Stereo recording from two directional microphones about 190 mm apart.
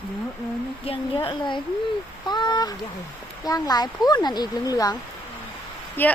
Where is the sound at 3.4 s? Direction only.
20° left (ahead or behind).